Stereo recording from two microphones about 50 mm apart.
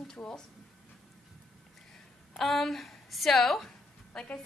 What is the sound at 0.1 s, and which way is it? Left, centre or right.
Speech, centre.